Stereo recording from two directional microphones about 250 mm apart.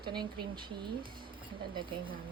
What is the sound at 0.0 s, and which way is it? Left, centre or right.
Speech, centre.